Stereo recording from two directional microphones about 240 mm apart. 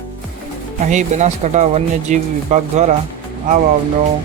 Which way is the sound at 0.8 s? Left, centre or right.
Right.